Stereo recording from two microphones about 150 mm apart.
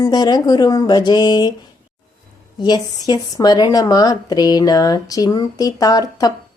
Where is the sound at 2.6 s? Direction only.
25° left (ahead or behind).